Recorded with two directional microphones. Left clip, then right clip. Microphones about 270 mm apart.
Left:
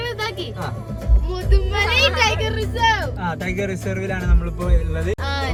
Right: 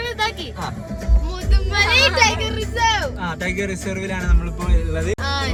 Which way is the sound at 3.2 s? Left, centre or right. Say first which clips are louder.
Even; centre.